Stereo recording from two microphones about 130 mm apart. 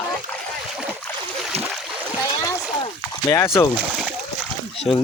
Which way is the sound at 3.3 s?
20° left (ahead or behind).